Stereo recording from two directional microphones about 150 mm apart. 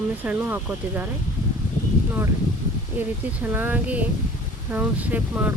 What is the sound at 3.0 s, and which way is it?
Speech, 10° right (ahead or behind).